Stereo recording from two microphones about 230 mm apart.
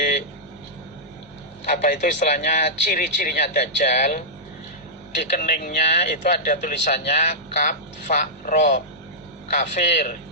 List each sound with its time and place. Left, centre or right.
1.6 s speech: left
5.3 s speech: left